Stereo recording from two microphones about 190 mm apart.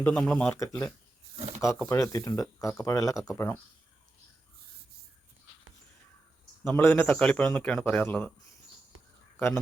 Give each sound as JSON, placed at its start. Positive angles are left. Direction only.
{"t": 0.0, "sound": "speech", "side_deg": 5}
{"t": 6.7, "sound": "speech", "side_deg": 10}